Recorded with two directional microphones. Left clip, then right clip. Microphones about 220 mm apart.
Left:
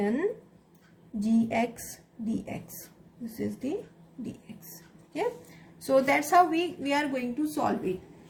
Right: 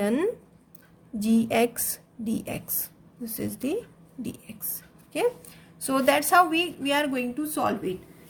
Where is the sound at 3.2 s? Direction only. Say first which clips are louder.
Right 2 dB; 45° right (ahead or behind).